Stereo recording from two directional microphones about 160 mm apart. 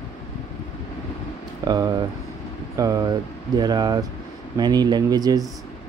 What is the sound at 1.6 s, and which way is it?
Speech, 25° right (ahead or behind).